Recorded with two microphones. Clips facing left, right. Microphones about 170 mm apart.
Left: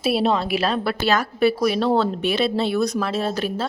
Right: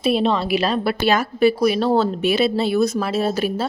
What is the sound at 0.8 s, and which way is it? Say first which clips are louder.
Speech: right 2 dB; 10° right (ahead or behind).